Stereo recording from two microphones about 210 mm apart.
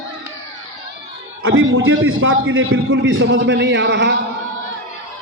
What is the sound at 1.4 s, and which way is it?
A man's voice, 65° right (ahead or behind).